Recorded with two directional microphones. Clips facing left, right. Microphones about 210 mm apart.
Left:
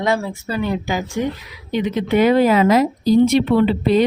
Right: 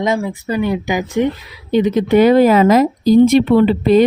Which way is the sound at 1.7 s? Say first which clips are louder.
Right 6 dB; 35° right (ahead or behind).